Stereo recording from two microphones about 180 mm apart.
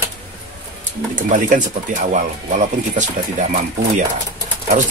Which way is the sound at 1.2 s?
45° right (ahead or behind).